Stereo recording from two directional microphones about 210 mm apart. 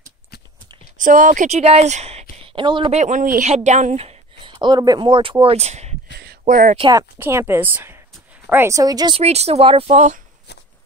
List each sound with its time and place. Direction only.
0.9 s a woman's voice: 40° right (ahead or behind)
6.1 s a sound: 45° right (ahead or behind)
6.8 s speech: 15° right (ahead or behind); by 10.2 s 35° right (ahead or behind)